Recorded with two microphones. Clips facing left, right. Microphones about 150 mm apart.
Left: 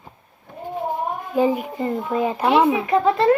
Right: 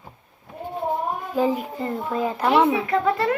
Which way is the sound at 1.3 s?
10° left (ahead or behind).